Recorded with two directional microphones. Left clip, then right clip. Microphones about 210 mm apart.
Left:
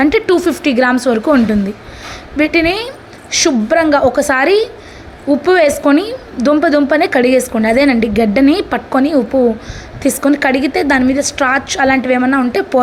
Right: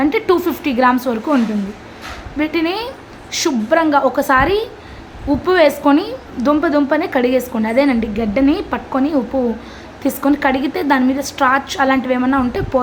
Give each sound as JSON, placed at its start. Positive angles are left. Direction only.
{"t": 0.0, "sound": "a woman's voice", "side_deg": 15}
{"t": 2.4, "sound": "a woman's voice", "side_deg": 15}